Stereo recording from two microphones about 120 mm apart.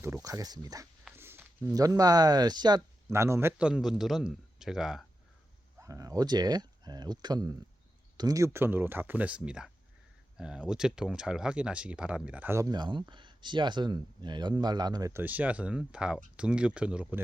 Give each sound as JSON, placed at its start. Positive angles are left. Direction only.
{"t": 0.0, "sound": "speech", "side_deg": -25}
{"t": 1.1, "sound": "walk", "side_deg": -20}
{"t": 1.7, "sound": "speech", "side_deg": -30}
{"t": 3.1, "sound": "speech", "side_deg": -20}
{"t": 3.6, "sound": "speech", "side_deg": -5}
{"t": 5.8, "sound": "speech", "side_deg": -30}
{"t": 12.7, "sound": "speech", "side_deg": -40}
{"t": 15.1, "sound": "speech", "side_deg": -15}